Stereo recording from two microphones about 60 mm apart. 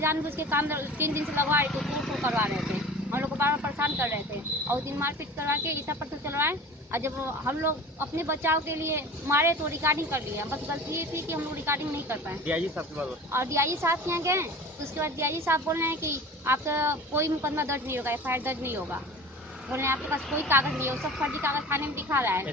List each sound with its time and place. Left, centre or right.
0.0 s a woman's voice: right
1.7 s vehicle: centre
2.2 s a woman's voice: right
2.5 s speech: centre
3.1 s a woman's voice: right
12.5 s speech: right
13.3 s a woman's voice: right